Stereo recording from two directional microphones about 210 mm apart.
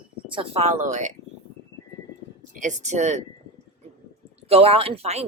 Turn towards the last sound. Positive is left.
turn(degrees=-30)  # may be behind; listen again after turning